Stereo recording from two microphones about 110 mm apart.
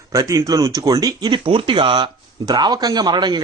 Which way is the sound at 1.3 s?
50° right (ahead or behind).